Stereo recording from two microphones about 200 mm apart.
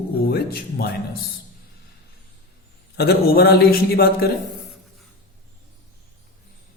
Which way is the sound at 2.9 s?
55° left (ahead or behind).